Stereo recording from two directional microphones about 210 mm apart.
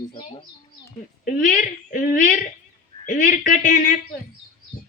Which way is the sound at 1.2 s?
40° left (ahead or behind).